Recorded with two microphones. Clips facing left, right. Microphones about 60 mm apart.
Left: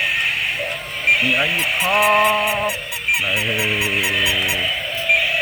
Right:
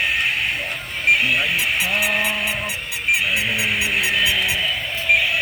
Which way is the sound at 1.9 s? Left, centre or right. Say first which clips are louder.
Left 6 dB; left.